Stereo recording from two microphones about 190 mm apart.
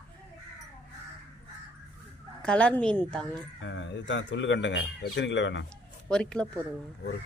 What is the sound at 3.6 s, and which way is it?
Speech, 75° left (ahead or behind).